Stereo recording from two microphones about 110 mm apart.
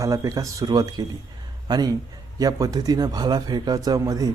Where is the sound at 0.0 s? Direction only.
30° right (ahead or behind).